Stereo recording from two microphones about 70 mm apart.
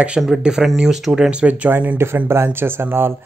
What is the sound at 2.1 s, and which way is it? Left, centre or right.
Speech, right.